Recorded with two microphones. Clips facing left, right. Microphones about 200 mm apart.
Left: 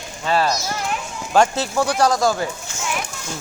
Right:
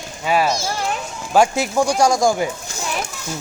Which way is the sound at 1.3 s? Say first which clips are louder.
Right 1 dB; 10° right (ahead or behind).